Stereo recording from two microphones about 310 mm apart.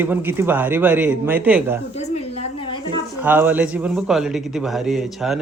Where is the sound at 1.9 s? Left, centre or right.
Centre.